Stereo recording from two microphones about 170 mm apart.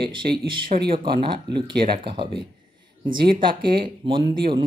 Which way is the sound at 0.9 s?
30° right (ahead or behind).